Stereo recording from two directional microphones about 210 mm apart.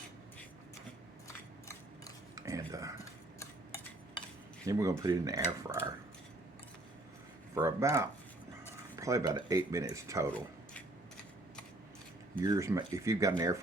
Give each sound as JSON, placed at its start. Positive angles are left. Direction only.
{"t": 2.3, "sound": "a sound", "side_deg": -15}
{"t": 3.0, "sound": "cutlery", "side_deg": 15}
{"t": 4.6, "sound": "speech", "side_deg": -15}
{"t": 7.5, "sound": "speech", "side_deg": -15}
{"t": 12.4, "sound": "speech", "side_deg": -15}